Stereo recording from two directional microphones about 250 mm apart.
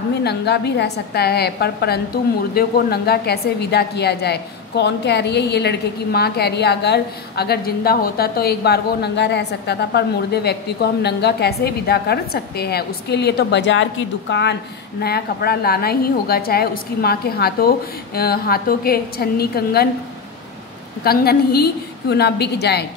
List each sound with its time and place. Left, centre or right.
0.2 s a woman's voice: left
21.0 s a woman's voice: left